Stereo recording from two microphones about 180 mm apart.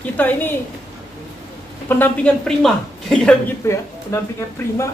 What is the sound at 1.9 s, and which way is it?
A woman's voice, 10° left (ahead or behind).